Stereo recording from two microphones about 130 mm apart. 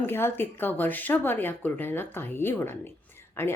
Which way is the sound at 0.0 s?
15° left (ahead or behind).